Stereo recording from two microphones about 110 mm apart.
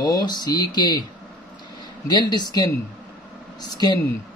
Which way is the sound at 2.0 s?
40° left (ahead or behind).